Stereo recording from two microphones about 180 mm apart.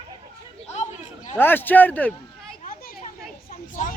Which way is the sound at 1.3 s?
10° left (ahead or behind).